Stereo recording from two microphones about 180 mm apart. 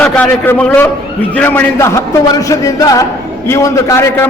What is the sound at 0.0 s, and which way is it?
A man's voice, 10° left (ahead or behind).